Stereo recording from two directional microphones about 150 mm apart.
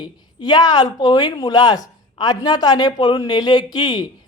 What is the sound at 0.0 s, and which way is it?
Speech, 30° left (ahead or behind).